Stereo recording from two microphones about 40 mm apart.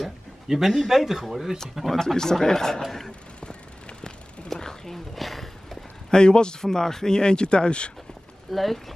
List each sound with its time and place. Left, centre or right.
0.5 s speech: centre
1.9 s speech: centre
4.6 s a sound: centre
6.0 s speech: left
8.5 s speech: centre